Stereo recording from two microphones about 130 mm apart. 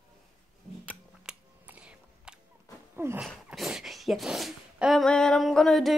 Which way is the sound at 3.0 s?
20° right (ahead or behind).